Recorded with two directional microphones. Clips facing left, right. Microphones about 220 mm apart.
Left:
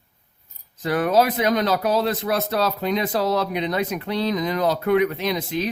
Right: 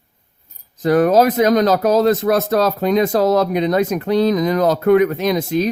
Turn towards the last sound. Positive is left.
turn(degrees=-45)  # may be behind; listen again after turning